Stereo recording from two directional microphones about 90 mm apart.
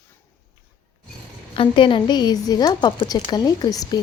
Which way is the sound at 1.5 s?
75° left (ahead or behind).